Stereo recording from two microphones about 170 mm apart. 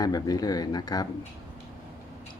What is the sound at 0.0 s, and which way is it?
Speech, 20° left (ahead or behind).